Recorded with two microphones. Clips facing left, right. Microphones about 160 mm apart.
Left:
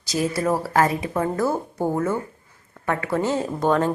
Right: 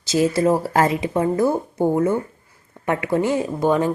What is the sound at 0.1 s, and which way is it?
A woman's voice, 25° right (ahead or behind).